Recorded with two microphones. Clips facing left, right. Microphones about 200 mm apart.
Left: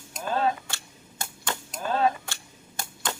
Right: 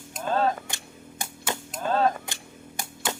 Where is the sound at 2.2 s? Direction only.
15° right (ahead or behind).